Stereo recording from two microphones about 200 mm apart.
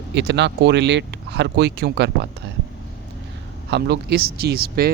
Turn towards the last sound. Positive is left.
turn(degrees=-50)  # may be behind; listen again after turning